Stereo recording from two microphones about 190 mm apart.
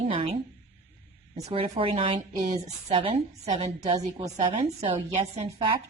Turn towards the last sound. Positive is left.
turn(degrees=-35)  # may be behind; listen again after turning